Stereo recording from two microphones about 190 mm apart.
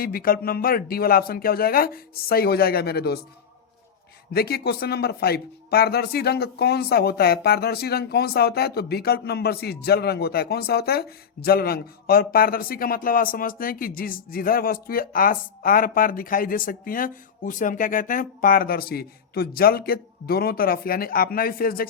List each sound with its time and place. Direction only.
0.0 s speech: 50° left (ahead or behind)
4.4 s speech: 55° left (ahead or behind)